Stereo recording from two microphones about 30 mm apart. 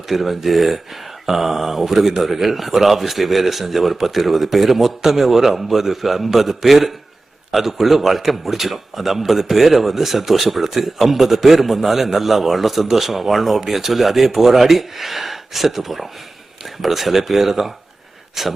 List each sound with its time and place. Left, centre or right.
0.1 s a man's voice: centre